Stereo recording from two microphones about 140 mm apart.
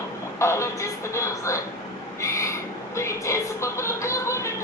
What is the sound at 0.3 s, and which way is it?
Speech, 20° left (ahead or behind).